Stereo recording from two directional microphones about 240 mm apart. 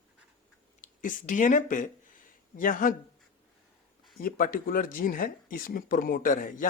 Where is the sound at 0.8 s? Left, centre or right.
Left.